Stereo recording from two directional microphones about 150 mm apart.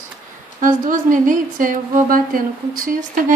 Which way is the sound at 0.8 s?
60° right (ahead or behind).